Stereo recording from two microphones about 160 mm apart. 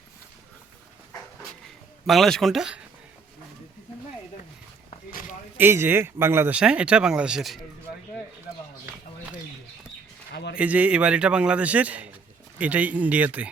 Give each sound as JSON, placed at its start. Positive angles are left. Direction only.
{"t": 2.0, "sound": "speech", "side_deg": 0}
{"t": 5.5, "sound": "speech", "side_deg": -15}
{"t": 10.3, "sound": "a sound", "side_deg": 90}
{"t": 10.6, "sound": "speech", "side_deg": -10}